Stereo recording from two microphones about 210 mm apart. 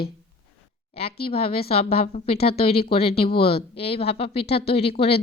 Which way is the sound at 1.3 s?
25° left (ahead or behind).